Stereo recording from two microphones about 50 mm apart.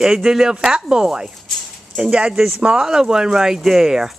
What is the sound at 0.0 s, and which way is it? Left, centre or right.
Speech, centre.